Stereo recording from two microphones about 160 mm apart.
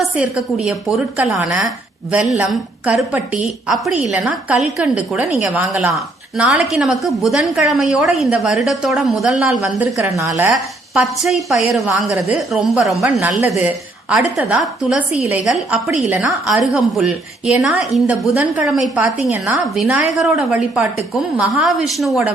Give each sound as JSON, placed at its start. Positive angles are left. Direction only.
{"t": 0.0, "sound": "a woman's voice", "side_deg": -5}
{"t": 10.1, "sound": "a woman's voice", "side_deg": -20}
{"t": 10.5, "sound": "a woman's voice", "side_deg": 0}